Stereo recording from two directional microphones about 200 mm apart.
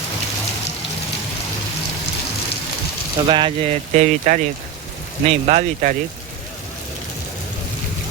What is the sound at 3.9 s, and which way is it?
Speech, 40° right (ahead or behind).